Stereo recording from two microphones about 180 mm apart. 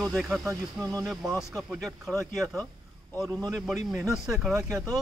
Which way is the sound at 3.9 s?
Centre (ahead or behind).